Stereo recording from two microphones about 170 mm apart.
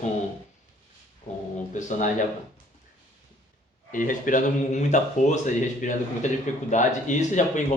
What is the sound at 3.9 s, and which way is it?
Speech, 50° left (ahead or behind).